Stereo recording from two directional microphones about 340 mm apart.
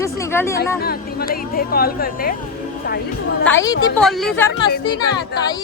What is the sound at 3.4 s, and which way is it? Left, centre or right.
Speech, centre.